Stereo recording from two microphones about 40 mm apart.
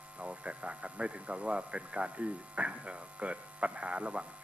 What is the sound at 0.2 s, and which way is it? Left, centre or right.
Speech, right.